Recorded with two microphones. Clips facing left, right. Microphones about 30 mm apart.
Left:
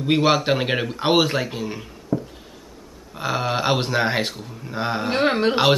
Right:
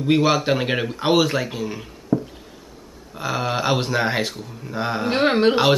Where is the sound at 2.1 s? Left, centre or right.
Right.